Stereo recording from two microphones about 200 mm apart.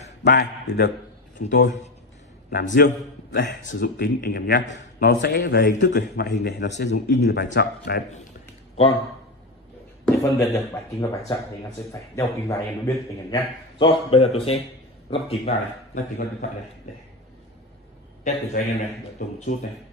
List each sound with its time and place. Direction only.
0.2 s a man's voice: 55° left (ahead or behind)
2.5 s a man's voice: 45° left (ahead or behind)
10.0 s a man's voice: 15° left (ahead or behind); by 16.0 s 30° left (ahead or behind)
18.2 s a man's voice: 40° left (ahead or behind)